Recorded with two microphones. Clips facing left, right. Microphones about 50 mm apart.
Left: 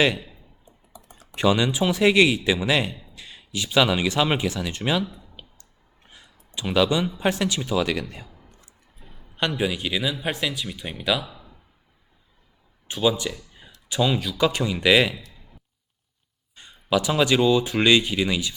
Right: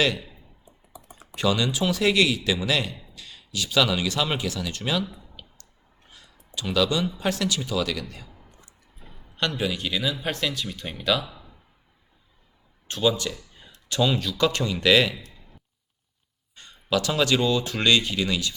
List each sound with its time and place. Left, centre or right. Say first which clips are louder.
0.0 s speech: left 3 dB; left
0.6 s computer keyboard: right 3 dB; centre
1.4 s speech: left 3 dB; left
9.3 s speech: left 2 dB; centre
12.9 s speech: left 1 dB; centre
16.6 s speech: left 2 dB; centre